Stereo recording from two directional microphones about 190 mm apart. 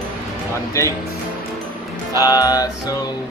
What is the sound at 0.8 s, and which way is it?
Speech, 15° left (ahead or behind).